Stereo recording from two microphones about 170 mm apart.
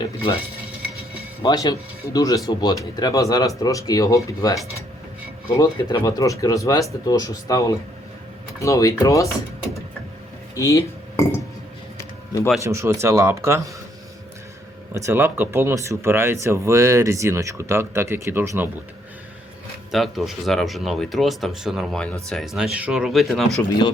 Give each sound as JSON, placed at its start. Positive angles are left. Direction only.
{"t": 0.0, "sound": "speech", "side_deg": 30}
{"t": 1.4, "sound": "speech", "side_deg": 20}
{"t": 10.5, "sound": "speech", "side_deg": 20}
{"t": 12.5, "sound": "speech", "side_deg": -15}
{"t": 14.9, "sound": "speech", "side_deg": -15}
{"t": 19.9, "sound": "speech", "side_deg": 0}